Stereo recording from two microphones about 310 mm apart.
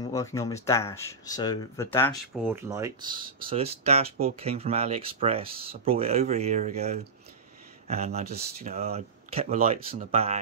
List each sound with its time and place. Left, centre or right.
0.1 s speech: centre
2.4 s speech: centre